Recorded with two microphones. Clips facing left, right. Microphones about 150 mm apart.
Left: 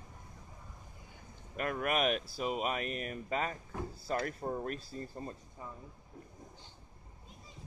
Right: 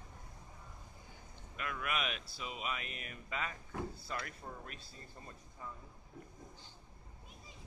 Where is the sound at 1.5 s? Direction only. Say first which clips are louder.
Left 7 dB; 45° left (ahead or behind).